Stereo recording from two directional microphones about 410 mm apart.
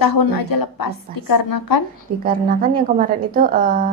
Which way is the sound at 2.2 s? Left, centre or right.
Right.